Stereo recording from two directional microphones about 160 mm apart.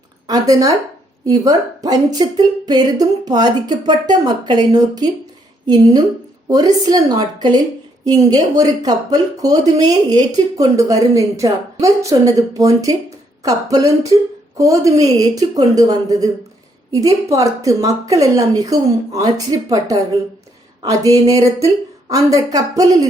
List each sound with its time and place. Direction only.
0.3 s speech: 20° right (ahead or behind)